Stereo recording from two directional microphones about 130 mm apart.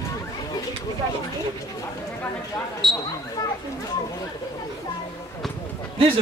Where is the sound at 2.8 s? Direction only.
5° left (ahead or behind).